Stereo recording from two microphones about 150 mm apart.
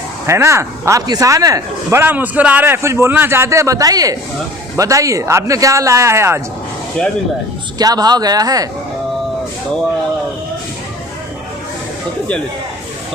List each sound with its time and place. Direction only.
0.3 s speech: 20° right (ahead or behind)
7.8 s speech: 25° right (ahead or behind)